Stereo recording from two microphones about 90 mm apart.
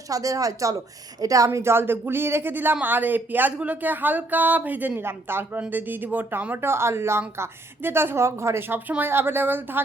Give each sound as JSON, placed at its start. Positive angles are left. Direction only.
{"t": 0.1, "sound": "speech", "side_deg": -40}
{"t": 1.5, "sound": "speech", "side_deg": -30}